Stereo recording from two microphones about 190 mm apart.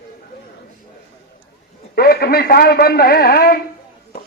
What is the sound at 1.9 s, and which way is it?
A man's voice, 55° left (ahead or behind).